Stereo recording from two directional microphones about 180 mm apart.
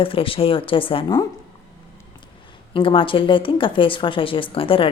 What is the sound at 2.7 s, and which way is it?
Speech, 30° left (ahead or behind).